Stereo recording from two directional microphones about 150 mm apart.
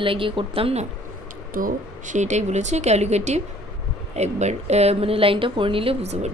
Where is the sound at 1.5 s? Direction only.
60° right (ahead or behind).